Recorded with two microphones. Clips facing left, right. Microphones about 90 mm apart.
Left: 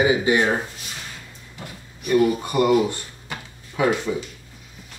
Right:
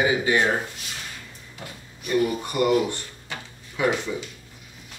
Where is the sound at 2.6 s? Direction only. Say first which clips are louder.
Left 3 dB; 25° left (ahead or behind).